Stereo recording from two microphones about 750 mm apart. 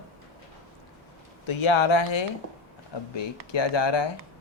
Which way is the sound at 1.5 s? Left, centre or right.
Left.